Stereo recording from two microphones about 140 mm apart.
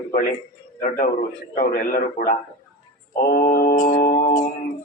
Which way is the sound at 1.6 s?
90° left.